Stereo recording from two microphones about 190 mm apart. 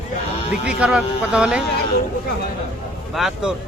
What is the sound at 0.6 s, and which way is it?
A man's voice, 5° right (ahead or behind).